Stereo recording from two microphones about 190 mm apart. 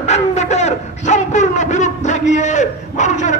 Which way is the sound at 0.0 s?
35° left (ahead or behind).